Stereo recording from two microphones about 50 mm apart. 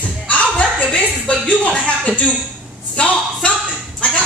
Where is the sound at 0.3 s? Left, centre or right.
Left.